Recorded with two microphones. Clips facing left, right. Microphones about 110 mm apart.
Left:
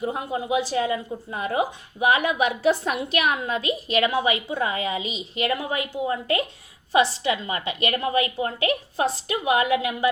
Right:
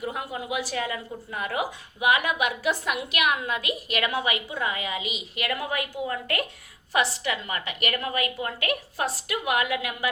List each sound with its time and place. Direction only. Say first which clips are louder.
0.0 s a woman's voice: left 5 dB; 25° left (ahead or behind)